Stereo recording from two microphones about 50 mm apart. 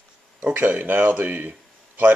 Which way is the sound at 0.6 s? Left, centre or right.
Right.